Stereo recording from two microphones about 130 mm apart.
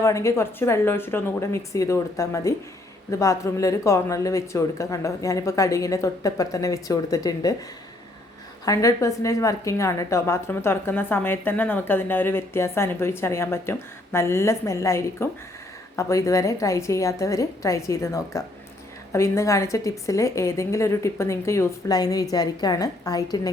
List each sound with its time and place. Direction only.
0.0 s a woman's voice: 25° left (ahead or behind)
8.6 s a woman's voice: 25° left (ahead or behind)